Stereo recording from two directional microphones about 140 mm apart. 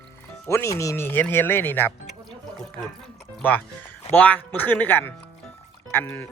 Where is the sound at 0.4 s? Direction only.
20° left (ahead or behind).